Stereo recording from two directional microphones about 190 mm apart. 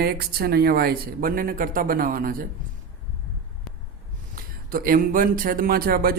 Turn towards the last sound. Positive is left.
turn(degrees=-50)  # may be behind; listen again after turning